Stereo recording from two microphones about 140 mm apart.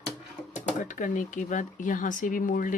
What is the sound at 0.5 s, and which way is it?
Speech, 70° left (ahead or behind).